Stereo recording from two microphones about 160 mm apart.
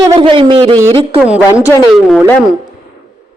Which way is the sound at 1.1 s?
5° right (ahead or behind).